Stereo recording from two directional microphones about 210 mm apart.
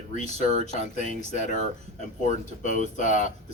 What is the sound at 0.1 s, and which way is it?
Speech, 35° left (ahead or behind).